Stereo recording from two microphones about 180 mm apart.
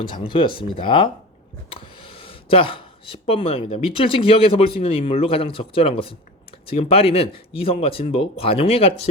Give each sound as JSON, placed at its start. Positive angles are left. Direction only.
{"t": 0.1, "sound": "speech", "side_deg": 30}